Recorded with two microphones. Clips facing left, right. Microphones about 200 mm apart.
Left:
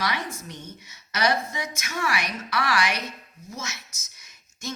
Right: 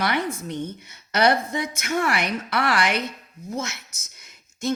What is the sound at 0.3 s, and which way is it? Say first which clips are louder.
A woman's voice: right 10 dB; 55° right (ahead or behind).